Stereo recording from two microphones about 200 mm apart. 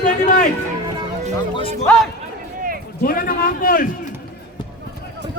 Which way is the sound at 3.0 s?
45° left (ahead or behind).